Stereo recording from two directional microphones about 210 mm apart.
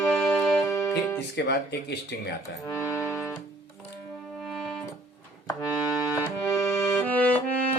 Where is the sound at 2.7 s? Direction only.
15° left (ahead or behind).